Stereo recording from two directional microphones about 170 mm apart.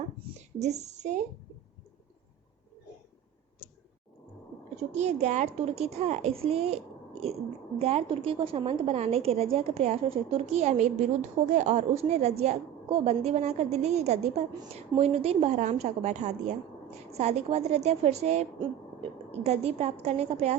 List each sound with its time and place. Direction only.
0.6 s a woman's voice: 40° right (ahead or behind)
4.8 s a woman's voice: 40° right (ahead or behind)
7.8 s a woman's voice: 40° right (ahead or behind)